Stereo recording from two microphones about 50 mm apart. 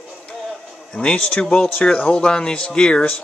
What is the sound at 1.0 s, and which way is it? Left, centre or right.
Speech, left.